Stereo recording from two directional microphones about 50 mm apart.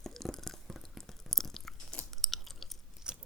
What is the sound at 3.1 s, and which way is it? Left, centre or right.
Biting, centre.